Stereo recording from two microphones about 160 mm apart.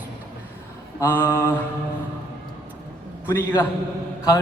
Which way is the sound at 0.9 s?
15° left (ahead or behind).